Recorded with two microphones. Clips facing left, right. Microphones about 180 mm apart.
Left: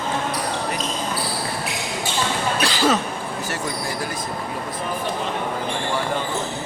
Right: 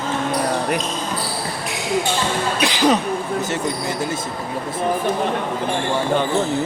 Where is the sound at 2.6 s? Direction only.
15° right (ahead or behind).